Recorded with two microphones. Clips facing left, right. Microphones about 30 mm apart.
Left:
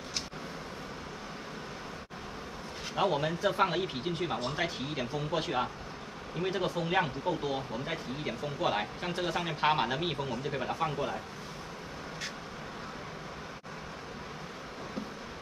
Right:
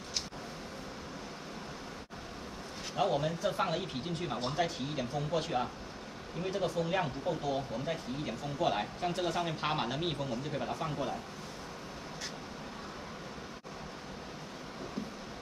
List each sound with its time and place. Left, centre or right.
3.0 s speech: left